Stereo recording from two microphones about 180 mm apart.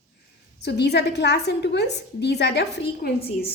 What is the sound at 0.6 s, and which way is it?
A woman's voice, 70° left (ahead or behind).